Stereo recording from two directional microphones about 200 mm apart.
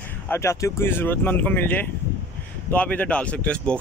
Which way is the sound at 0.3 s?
15° left (ahead or behind).